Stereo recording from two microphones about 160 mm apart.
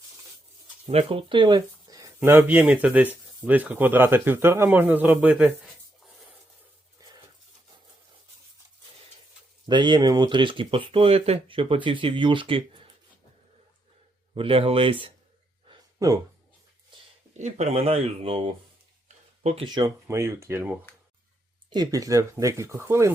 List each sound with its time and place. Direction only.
0.9 s speech: 35° right (ahead or behind); by 5.5 s 10° right (ahead or behind)
7.0 s a sound: 20° right (ahead or behind)
9.6 s speech: 30° right (ahead or behind)
14.3 s speech: 35° right (ahead or behind)
16.0 s speech: 20° right (ahead or behind)
17.3 s speech: 45° right (ahead or behind)
19.0 s a sound: 40° right (ahead or behind)
19.6 s speech: 25° right (ahead or behind)